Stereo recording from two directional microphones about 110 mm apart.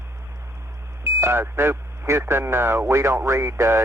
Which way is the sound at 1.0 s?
25° right (ahead or behind).